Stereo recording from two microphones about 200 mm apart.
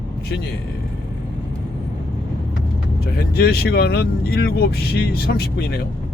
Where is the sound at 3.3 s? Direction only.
50° left (ahead or behind).